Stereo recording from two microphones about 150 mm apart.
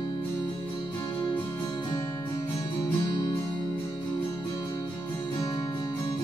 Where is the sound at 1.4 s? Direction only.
15° left (ahead or behind).